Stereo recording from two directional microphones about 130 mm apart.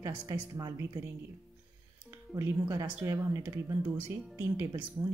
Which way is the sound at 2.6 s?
25° right (ahead or behind).